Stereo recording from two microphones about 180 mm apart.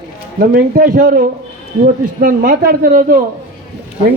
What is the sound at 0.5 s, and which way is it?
Speech, 50° right (ahead or behind).